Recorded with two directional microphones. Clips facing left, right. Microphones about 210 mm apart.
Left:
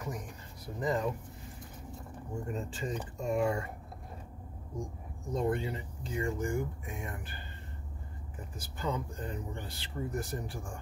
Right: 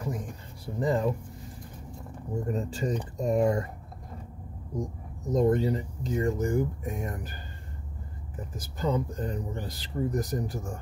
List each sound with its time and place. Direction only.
0.0 s a sound: 30° right (ahead or behind)
0.7 s speech: 30° right (ahead or behind)
2.4 s speech: 40° right (ahead or behind)
5.3 s speech: 40° right (ahead or behind)
8.5 s speech: 35° right (ahead or behind)